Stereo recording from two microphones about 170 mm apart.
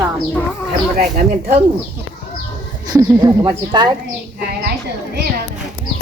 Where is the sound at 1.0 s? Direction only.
45° right (ahead or behind).